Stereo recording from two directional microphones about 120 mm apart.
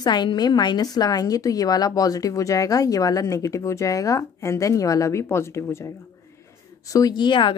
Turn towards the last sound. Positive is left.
turn(degrees=40)  # may be behind; listen again after turning